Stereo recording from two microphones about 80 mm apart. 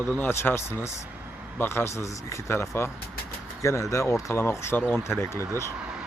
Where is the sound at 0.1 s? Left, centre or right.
Left.